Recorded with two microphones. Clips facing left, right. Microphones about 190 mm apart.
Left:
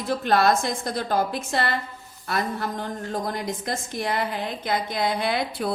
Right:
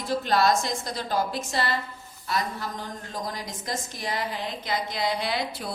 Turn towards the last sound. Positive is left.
turn(degrees=55)  # may be behind; listen again after turning